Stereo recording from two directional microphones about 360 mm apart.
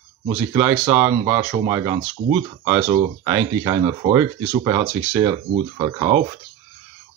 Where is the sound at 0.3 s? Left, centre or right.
Centre.